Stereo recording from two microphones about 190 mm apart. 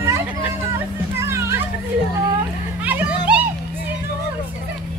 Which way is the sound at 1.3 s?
15° right (ahead or behind).